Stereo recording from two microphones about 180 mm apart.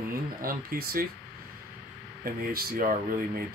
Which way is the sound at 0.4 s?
55° right (ahead or behind).